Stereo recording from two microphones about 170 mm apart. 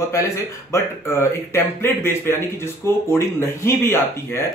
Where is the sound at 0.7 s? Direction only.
15° left (ahead or behind).